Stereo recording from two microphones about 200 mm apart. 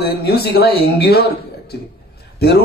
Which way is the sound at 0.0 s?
55° left (ahead or behind).